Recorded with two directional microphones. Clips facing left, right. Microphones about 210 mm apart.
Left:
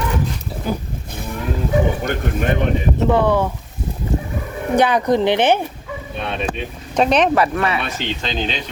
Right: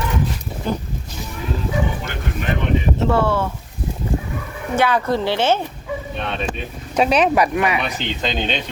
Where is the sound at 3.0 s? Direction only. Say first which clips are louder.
Left 4 dB; 15° left (ahead or behind).